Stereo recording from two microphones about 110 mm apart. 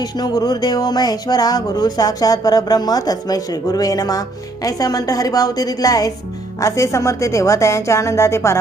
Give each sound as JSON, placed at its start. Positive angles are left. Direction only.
{"t": 0.0, "sound": "speech", "side_deg": 35}